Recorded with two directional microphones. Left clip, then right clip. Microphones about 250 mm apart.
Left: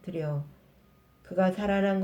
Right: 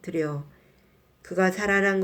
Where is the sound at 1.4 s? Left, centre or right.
Right.